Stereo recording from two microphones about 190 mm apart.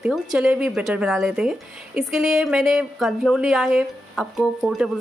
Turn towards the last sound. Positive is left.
turn(degrees=-5)  # may be behind; listen again after turning